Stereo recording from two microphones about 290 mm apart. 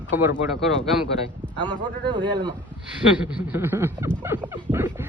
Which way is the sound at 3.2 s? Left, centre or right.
Centre.